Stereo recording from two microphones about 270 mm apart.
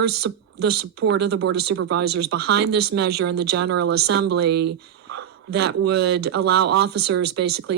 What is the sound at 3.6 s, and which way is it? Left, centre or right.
Speech, right.